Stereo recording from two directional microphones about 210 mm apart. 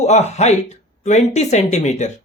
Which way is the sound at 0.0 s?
35° left (ahead or behind).